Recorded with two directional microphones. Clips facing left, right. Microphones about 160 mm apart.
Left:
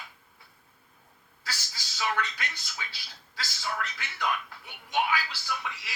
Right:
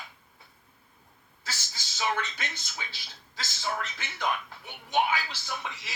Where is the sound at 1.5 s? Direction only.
25° right (ahead or behind).